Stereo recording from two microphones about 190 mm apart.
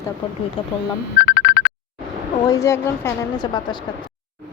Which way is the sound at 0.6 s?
30° left (ahead or behind).